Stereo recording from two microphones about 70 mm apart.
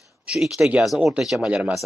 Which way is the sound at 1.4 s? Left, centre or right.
Centre.